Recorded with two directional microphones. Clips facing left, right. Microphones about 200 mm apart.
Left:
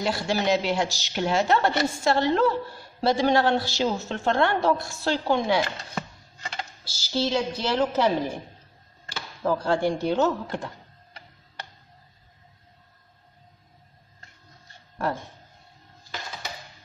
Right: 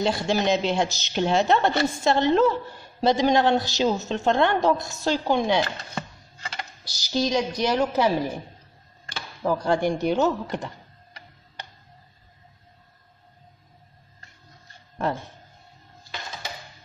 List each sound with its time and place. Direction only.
0.0 s a woman's voice: 20° right (ahead or behind)
6.8 s a woman's voice: 15° right (ahead or behind)
9.4 s a woman's voice: 15° right (ahead or behind)
15.0 s a woman's voice: 20° right (ahead or behind)